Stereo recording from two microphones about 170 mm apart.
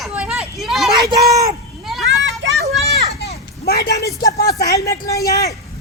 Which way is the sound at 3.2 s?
80° left.